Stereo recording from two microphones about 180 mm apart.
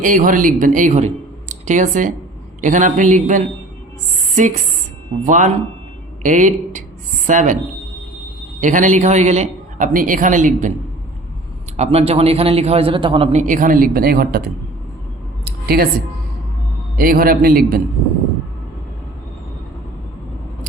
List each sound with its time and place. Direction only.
0.0 s a man's voice: 50° right (ahead or behind)
8.6 s a man's voice: 45° right (ahead or behind)
11.8 s a man's voice: 35° right (ahead or behind)
13.4 s a man's voice: 45° right (ahead or behind)
15.4 s a sound: 55° right (ahead or behind)
17.0 s a man's voice: 55° right (ahead or behind)